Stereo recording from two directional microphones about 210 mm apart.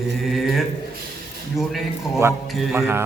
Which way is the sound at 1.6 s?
Centre (ahead or behind).